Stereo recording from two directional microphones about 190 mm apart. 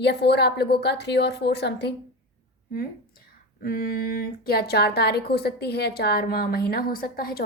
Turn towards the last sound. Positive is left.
turn(degrees=50)  # may be behind; listen again after turning